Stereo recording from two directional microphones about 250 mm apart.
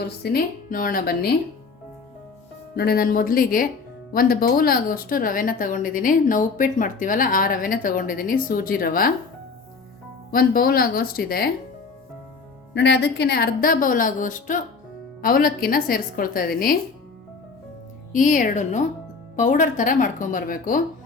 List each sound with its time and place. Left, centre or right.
0.2 s speech: left
2.7 s speech: left
10.3 s speech: left
12.7 s speech: left
18.1 s speech: left